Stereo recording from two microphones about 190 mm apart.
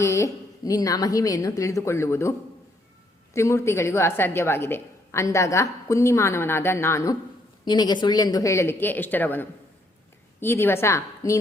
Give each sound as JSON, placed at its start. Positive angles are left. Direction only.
{"t": 0.0, "sound": "a woman's voice", "side_deg": 15}
{"t": 3.3, "sound": "a woman's voice", "side_deg": 15}